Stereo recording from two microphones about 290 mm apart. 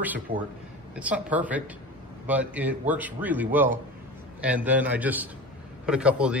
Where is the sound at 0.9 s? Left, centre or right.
Centre.